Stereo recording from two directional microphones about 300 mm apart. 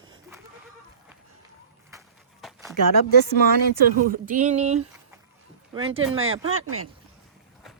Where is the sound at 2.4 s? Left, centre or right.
Centre.